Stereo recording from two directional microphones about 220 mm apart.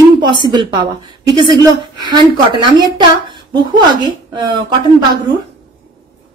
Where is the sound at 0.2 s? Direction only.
20° right (ahead or behind).